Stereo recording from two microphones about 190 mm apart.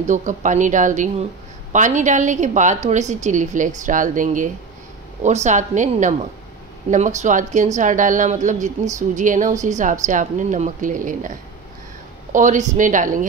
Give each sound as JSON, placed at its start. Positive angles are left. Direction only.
{"t": 0.0, "sound": "a woman's voice", "side_deg": -40}